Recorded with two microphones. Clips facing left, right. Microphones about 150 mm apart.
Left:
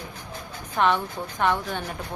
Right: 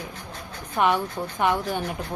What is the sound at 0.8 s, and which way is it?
Speech, 10° right (ahead or behind).